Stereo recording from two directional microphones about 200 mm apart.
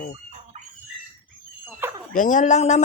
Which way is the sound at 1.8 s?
10° right (ahead or behind).